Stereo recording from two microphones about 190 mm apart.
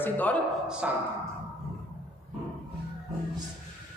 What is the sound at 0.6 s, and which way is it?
Speech, 5° right (ahead or behind).